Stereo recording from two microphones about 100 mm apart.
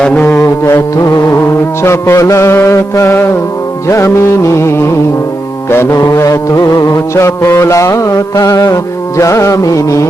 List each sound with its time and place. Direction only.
0.0 s music: 15° left (ahead or behind)
0.3 s music: 25° left (ahead or behind)
6.0 s music: 35° left (ahead or behind)